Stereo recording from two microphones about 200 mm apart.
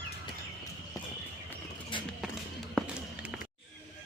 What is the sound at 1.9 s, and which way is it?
Music, 25° left (ahead or behind).